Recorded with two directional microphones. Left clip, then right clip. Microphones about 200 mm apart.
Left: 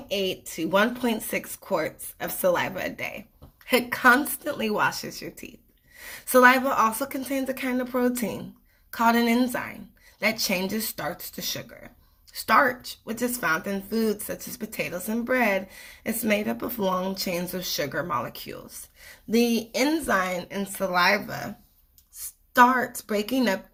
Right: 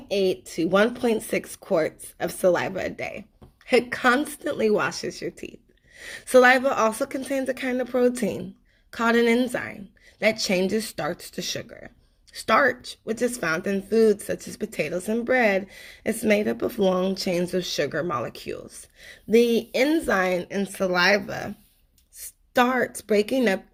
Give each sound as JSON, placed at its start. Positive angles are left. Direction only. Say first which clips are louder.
{"t": 0.1, "sound": "speech", "louder": "right 4 dB", "side_deg": -40}
{"t": 22.5, "sound": "speech", "louder": "left 3 dB", "side_deg": -45}